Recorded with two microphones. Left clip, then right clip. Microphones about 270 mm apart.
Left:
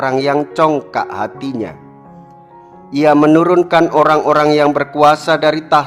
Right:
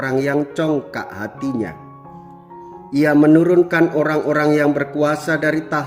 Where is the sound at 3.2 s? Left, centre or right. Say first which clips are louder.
Left 3 dB; left.